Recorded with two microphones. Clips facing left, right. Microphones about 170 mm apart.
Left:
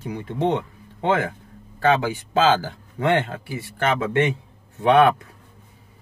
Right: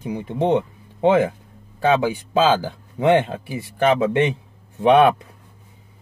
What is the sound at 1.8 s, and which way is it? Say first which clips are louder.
Speech: right 2 dB; 15° right (ahead or behind).